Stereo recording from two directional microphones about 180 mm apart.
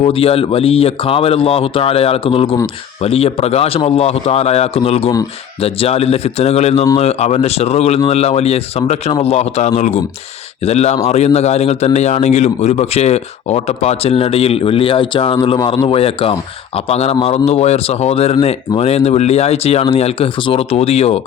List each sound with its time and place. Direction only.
0.0 s speech: 30° left (ahead or behind)